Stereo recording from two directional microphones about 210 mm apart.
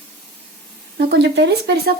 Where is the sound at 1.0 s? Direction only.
50° right (ahead or behind).